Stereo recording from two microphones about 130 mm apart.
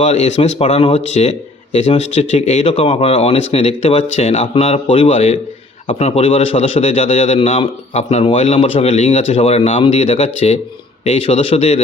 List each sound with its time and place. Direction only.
0.0 s a man's voice: 60° left (ahead or behind)